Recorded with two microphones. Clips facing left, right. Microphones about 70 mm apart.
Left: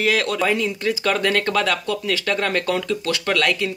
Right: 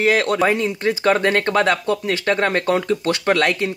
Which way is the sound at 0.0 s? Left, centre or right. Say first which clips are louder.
Right 3 dB; right.